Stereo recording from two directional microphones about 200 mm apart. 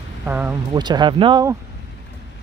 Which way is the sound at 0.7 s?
20° right (ahead or behind).